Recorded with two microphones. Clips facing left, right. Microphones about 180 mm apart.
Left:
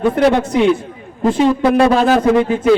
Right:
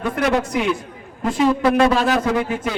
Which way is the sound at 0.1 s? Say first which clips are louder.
Left 6 dB; 30° left (ahead or behind).